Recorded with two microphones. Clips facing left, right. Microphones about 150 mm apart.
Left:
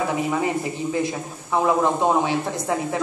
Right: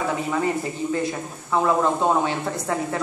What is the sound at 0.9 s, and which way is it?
A woman's voice, 15° left (ahead or behind).